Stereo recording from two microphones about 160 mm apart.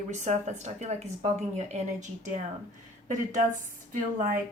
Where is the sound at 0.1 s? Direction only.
45° right (ahead or behind).